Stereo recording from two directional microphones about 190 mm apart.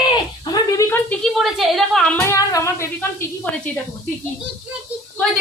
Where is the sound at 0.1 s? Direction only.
20° left (ahead or behind).